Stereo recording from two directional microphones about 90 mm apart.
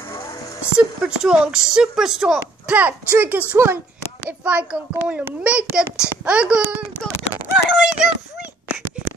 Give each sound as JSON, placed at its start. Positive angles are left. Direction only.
{"t": 0.7, "sound": "a woman's voice", "side_deg": -10}
{"t": 3.5, "sound": "a child's voice", "side_deg": -30}
{"t": 4.3, "sound": "a woman's voice", "side_deg": -15}
{"t": 7.5, "sound": "a sound", "side_deg": -10}